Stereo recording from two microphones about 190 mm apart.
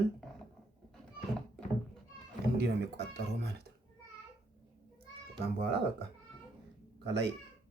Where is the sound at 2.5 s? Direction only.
60° right (ahead or behind).